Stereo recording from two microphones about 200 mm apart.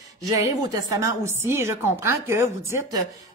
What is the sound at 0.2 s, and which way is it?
A woman's voice, 20° right (ahead or behind).